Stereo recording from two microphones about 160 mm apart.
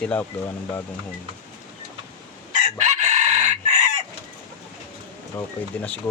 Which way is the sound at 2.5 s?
50° right (ahead or behind).